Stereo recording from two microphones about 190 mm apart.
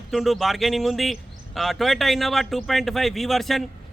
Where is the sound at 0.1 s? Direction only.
Centre (ahead or behind).